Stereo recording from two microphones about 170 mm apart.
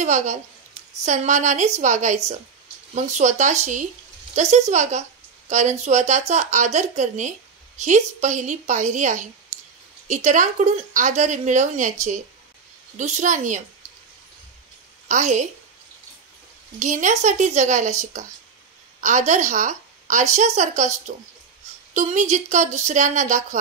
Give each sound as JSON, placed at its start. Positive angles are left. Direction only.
{"t": 0.0, "sound": "a woman's voice", "side_deg": -45}
{"t": 15.0, "sound": "a woman's voice", "side_deg": -45}
{"t": 16.8, "sound": "a woman's voice", "side_deg": -45}
{"t": 19.0, "sound": "a woman's voice", "side_deg": -45}